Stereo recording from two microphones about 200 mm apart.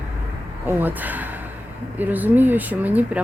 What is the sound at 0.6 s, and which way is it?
Speech, 10° right (ahead or behind).